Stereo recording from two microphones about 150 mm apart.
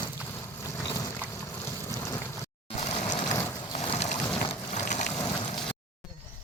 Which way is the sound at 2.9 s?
45° left (ahead or behind).